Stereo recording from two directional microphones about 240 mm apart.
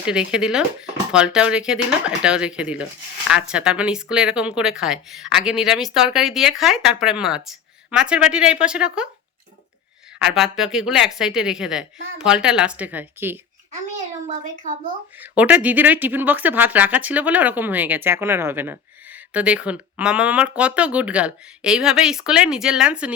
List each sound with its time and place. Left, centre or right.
0.0 s speech: centre
10.2 s speech: centre
14.3 s a child's voice: right
15.2 s speech: centre